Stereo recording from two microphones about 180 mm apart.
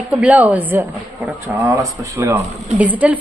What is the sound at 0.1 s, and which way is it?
A woman's voice, 10° right (ahead or behind).